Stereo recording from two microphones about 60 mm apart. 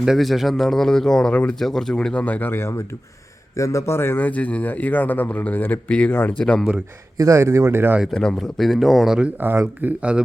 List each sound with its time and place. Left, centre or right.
0.0 s speech: centre
1.3 s speech: left
1.5 s speech: centre
2.0 s speech: centre
2.5 s a man's voice: left
3.5 s a man's voice: left
4.2 s speech: left
6.4 s speech: centre
7.2 s speech: right
8.1 s speech: centre
9.4 s speech: right